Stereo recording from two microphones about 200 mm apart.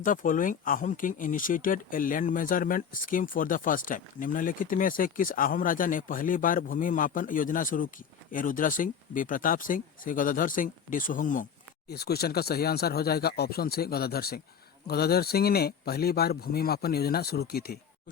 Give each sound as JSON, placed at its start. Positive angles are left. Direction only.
{"t": 0.0, "sound": "speech", "side_deg": 40}
{"t": 11.9, "sound": "speech", "side_deg": 50}